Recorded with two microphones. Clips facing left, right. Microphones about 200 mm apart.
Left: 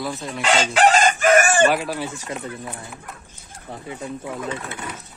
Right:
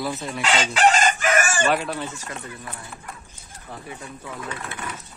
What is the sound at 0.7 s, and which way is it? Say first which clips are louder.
Chicken: left 2 dB; 60° left (ahead or behind).